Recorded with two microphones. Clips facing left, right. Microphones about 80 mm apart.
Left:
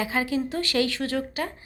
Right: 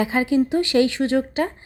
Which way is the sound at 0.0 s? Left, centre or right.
Right.